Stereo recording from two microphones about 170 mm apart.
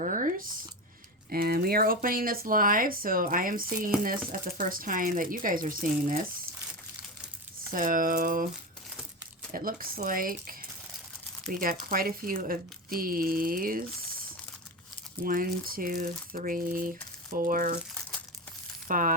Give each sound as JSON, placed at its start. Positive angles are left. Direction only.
{"t": 0.0, "sound": "a sound", "side_deg": -50}
{"t": 1.3, "sound": "speech", "side_deg": -60}
{"t": 7.7, "sound": "speech", "side_deg": -55}
{"t": 9.5, "sound": "speech", "side_deg": -55}
{"t": 15.2, "sound": "speech", "side_deg": -55}
{"t": 18.9, "sound": "speech", "side_deg": -55}